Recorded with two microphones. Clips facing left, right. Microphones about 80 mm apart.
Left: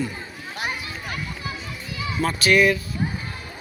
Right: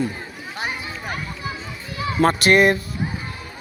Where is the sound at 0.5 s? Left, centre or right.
Right.